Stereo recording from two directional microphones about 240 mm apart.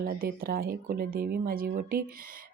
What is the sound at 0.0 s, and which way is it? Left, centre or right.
Speech, right.